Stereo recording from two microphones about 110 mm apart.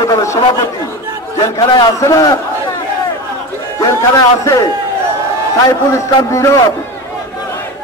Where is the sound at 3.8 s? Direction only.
30° left (ahead or behind).